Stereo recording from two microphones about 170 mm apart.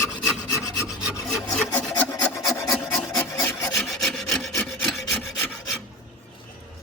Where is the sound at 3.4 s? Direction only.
20° left (ahead or behind).